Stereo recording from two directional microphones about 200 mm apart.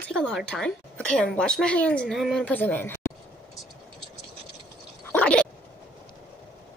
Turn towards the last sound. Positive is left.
turn(degrees=5)  # may be behind; listen again after turning